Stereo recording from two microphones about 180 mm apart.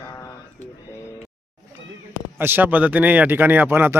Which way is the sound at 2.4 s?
10° right (ahead or behind).